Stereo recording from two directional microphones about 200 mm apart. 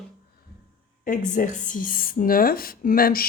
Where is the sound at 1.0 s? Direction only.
40° left (ahead or behind).